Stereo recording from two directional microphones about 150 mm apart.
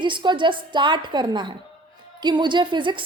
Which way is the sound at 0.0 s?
30° right (ahead or behind).